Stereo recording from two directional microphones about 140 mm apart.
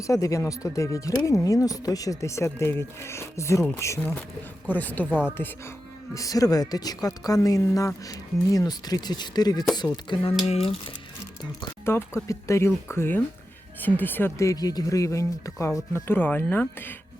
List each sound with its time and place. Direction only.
0.1 s speech: 25° left (ahead or behind)
6.1 s speech: 25° left (ahead or behind)
10.4 s speech: 45° left (ahead or behind)
11.9 s speech: 15° left (ahead or behind)